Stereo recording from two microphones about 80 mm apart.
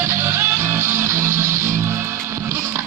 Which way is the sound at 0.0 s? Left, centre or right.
Right.